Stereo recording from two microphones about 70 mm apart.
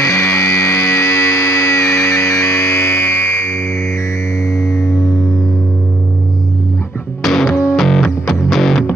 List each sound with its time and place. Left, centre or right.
0.0 s music: left
7.2 s music: centre